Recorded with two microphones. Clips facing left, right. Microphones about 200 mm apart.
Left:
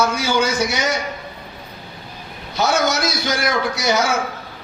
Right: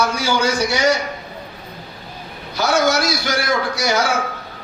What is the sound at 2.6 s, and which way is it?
Speech, 20° left (ahead or behind).